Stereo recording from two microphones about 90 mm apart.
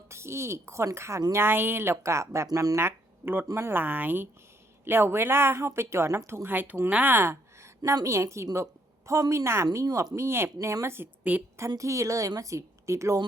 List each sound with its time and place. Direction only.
0.1 s a woman's voice: 30° right (ahead or behind)
2.5 s speech: 45° right (ahead or behind)
2.7 s speech: 25° right (ahead or behind)
7.8 s a woman's voice: 45° right (ahead or behind)
8.0 s a woman's voice: 35° right (ahead or behind)
8.5 s a sound: 35° right (ahead or behind)
9.3 s a woman's voice: 30° right (ahead or behind)
11.8 s a woman's voice: 35° right (ahead or behind)